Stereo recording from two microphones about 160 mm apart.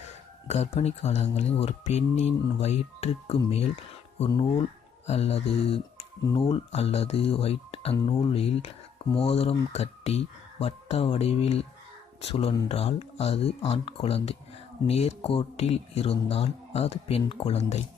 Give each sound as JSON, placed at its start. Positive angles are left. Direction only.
{"t": 0.4, "sound": "speech", "side_deg": 45}